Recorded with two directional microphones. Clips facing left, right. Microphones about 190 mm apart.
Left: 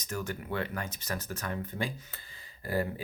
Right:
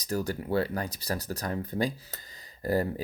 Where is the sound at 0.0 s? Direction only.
35° right (ahead or behind).